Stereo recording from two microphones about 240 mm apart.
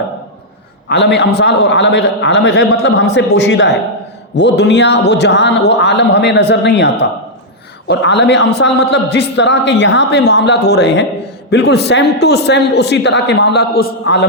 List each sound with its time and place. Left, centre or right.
0.9 s a man's voice: left